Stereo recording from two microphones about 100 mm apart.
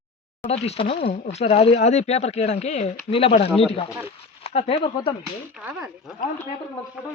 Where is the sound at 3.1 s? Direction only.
75° left (ahead or behind).